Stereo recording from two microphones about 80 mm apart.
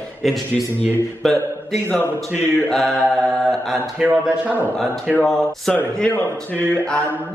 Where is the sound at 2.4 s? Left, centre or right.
Left.